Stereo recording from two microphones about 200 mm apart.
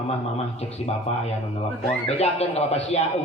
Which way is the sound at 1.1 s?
30° left (ahead or behind).